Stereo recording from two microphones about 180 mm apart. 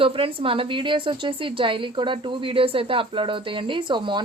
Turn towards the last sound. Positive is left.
turn(degrees=-25)  # may be behind; listen again after turning